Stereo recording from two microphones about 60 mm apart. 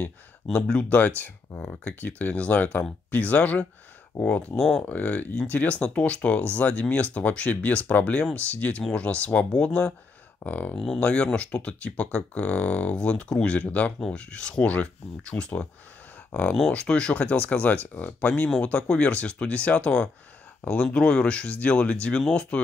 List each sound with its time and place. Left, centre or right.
0.5 s speech: centre
0.9 s speech: left
4.6 s speech: centre
4.8 s speech: left
10.4 s speech: left
16.7 s speech: centre